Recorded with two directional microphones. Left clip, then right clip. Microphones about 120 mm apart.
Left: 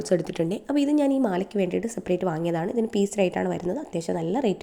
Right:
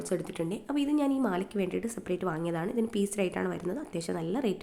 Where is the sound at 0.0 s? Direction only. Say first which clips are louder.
Left 8 dB; 45° left (ahead or behind).